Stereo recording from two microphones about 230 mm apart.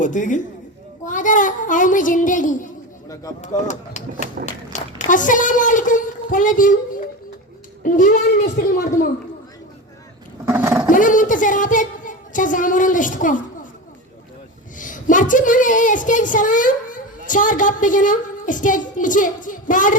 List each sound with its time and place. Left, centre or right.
0.0 s a woman's voice: left
4.7 s a sound: left
7.9 s a woman's voice: left
10.4 s a sound: centre
10.9 s a woman's voice: left
14.8 s a woman's voice: left